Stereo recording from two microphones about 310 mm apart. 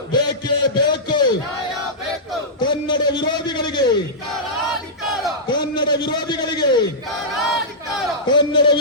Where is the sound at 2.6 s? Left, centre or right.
Centre.